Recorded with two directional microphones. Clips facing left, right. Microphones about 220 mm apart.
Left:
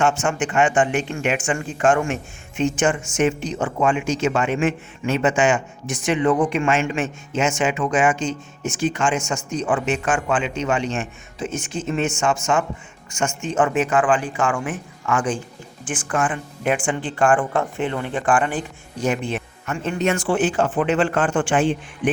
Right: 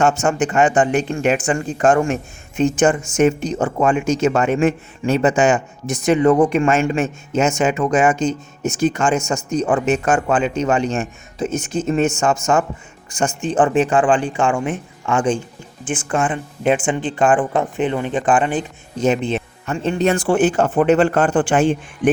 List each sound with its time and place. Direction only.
0.0 s speech: 40° right (ahead or behind)